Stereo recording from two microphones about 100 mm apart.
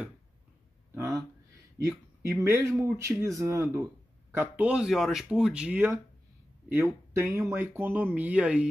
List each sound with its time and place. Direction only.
1.8 s speech: 30° right (ahead or behind)
4.3 s speech: 15° right (ahead or behind)
6.7 s speech: 30° right (ahead or behind); by 8.6 s 10° right (ahead or behind)